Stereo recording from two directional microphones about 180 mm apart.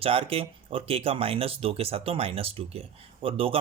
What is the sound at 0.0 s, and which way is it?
Speech, 30° right (ahead or behind).